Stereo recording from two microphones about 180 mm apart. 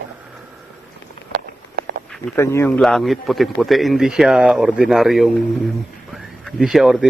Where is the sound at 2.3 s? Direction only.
15° left (ahead or behind).